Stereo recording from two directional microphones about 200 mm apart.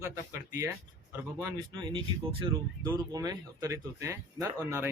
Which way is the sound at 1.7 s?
25° right (ahead or behind).